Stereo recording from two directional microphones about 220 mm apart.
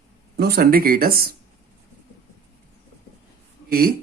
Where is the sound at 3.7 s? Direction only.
40° right (ahead or behind).